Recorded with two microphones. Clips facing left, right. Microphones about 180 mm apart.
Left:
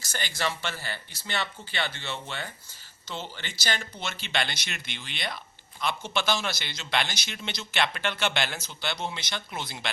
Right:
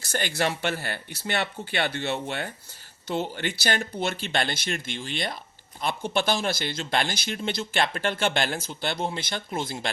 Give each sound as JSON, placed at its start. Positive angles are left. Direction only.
{"t": 0.0, "sound": "speech", "side_deg": -55}